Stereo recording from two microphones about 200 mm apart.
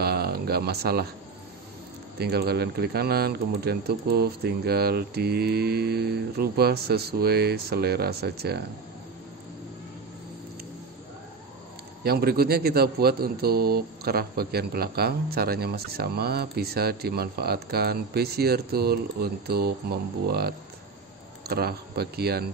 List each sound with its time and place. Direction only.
0.0 s a sound: 50° right (ahead or behind)
2.1 s a man's voice: 55° right (ahead or behind)
12.0 s a man's voice: 50° right (ahead or behind)